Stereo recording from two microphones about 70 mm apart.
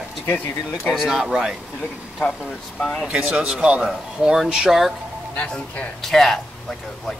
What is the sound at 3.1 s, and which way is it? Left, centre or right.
Speech, centre.